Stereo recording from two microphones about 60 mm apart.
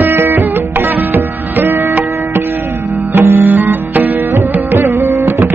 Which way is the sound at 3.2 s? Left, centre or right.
Right.